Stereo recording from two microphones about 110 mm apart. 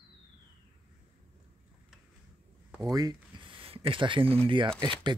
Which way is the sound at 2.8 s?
35° right (ahead or behind).